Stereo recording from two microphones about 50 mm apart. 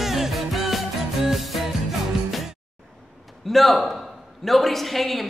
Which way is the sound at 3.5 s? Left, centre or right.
Centre.